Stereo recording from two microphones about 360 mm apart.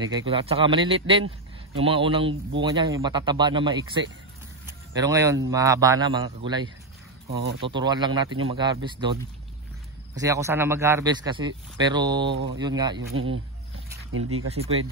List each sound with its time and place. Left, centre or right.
0.0 s speech: centre
4.6 s a sound: centre
5.5 s speech: centre
7.6 s speech: centre
10.1 s speech: centre
13.1 s speech: right